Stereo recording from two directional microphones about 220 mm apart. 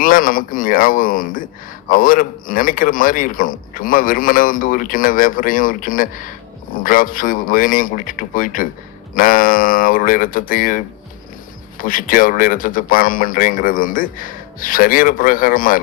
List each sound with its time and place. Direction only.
0.0 s a man's voice: 40° left (ahead or behind)